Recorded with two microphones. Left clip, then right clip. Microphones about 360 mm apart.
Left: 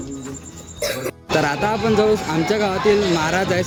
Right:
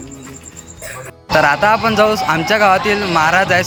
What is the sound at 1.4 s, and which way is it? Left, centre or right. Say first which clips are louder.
A man's voice: right 8 dB; centre.